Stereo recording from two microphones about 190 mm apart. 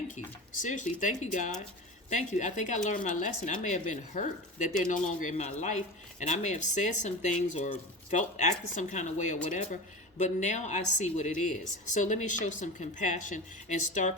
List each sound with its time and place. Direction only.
0.6 s speech: 40° left (ahead or behind)